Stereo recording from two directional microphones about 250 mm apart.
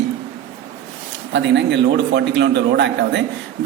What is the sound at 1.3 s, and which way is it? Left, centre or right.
A man's voice, right.